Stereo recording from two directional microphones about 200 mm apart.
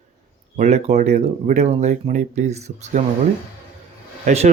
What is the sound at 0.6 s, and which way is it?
Speech, 35° right (ahead or behind).